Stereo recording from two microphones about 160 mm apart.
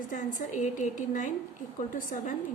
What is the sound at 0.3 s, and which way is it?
A woman's voice, 50° left (ahead or behind).